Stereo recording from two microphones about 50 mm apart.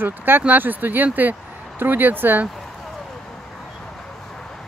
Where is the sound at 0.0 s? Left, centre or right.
Right.